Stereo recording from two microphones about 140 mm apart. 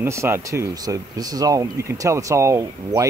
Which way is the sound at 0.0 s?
20° right (ahead or behind).